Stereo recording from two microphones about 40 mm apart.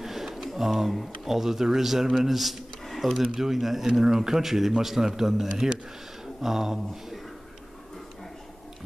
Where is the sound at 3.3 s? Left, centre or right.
Centre.